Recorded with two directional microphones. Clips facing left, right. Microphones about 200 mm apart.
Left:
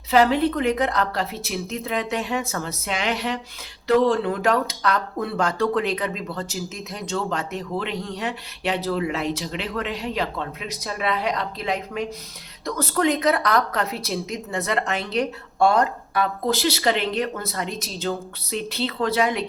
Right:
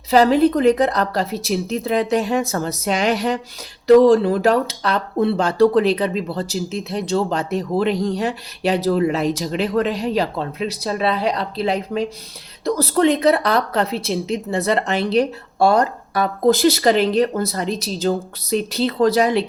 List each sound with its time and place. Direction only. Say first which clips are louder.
0.1 s speech: right 5 dB; 35° right (ahead or behind)